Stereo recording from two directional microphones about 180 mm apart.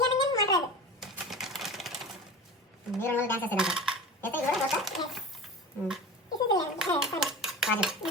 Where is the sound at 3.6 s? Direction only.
5° right (ahead or behind).